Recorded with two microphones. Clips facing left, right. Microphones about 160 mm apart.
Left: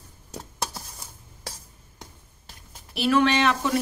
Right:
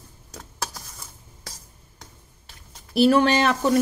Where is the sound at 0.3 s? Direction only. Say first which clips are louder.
Left 1 dB; 30° left (ahead or behind).